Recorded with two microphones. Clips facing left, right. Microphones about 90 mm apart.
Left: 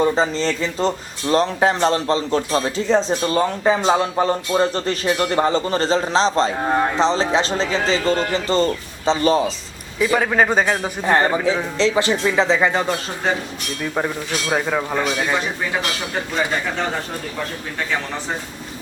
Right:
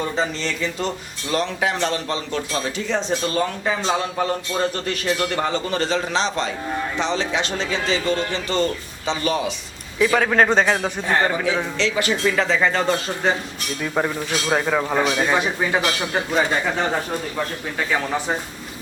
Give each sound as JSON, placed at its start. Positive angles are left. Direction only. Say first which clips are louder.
{"t": 0.0, "sound": "speech", "louder": "left 6 dB", "side_deg": 35}
{"t": 6.6, "sound": "speech", "louder": "left 7 dB", "side_deg": 60}
{"t": 6.9, "sound": "speech", "louder": "left 5 dB", "side_deg": 35}
{"t": 10.0, "sound": "a man's voice", "louder": "even", "side_deg": 5}
{"t": 11.0, "sound": "speech", "louder": "left 5 dB", "side_deg": 30}
{"t": 12.2, "sound": "a man's voice", "louder": "even", "side_deg": 20}
{"t": 14.5, "sound": "speech", "louder": "right 1 dB", "side_deg": 0}